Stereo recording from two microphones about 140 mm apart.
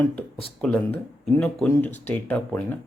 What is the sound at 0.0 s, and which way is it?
Speech, 5° left (ahead or behind).